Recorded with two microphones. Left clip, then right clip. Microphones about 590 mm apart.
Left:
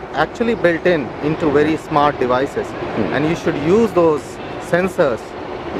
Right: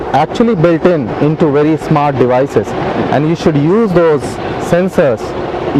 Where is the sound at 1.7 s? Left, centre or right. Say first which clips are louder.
Right 4 dB; right.